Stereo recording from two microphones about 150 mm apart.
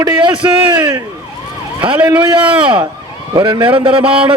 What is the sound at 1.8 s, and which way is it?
A man's voice, 30° right (ahead or behind).